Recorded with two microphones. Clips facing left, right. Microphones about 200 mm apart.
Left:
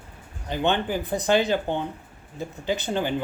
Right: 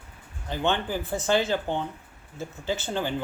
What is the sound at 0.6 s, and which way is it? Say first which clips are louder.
Speech: left 2 dB; 15° left (ahead or behind).